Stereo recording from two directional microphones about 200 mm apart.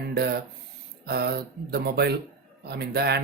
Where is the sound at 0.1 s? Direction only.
55° right (ahead or behind).